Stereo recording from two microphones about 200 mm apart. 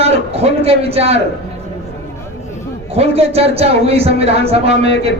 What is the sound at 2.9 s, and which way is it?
A man's voice, 30° right (ahead or behind).